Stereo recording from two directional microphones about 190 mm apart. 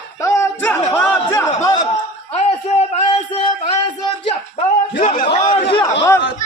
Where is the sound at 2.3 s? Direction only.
35° left (ahead or behind).